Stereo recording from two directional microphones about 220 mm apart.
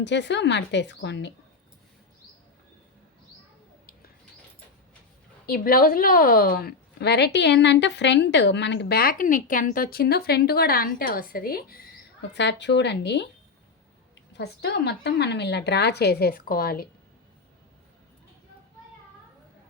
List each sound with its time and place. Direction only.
0.0 s a woman's voice: 50° left (ahead or behind)
5.5 s a woman's voice: 40° left (ahead or behind)
12.3 s a woman's voice: 50° left (ahead or behind)
14.3 s a woman's voice: 50° left (ahead or behind)